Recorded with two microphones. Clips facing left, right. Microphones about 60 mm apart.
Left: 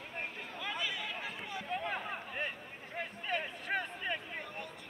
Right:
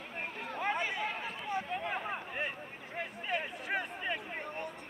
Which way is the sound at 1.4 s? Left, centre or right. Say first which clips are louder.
Right 6 dB; right.